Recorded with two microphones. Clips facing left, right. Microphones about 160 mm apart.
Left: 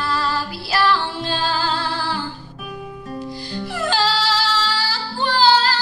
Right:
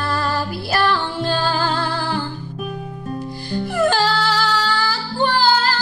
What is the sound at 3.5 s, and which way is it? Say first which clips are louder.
Music: right 6 dB; 50° right (ahead or behind).